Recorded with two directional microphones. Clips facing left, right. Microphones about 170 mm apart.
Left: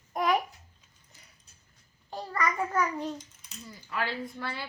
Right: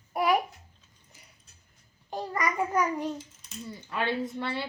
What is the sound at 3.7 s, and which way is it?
Speech, 25° right (ahead or behind).